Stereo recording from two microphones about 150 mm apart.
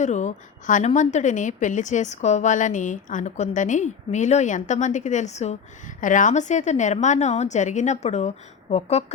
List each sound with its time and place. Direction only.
0.0 s a woman's voice: 50° left (ahead or behind)
6.0 s a woman's voice: 60° left (ahead or behind)